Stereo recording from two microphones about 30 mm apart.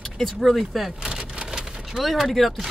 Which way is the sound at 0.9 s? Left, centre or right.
Right.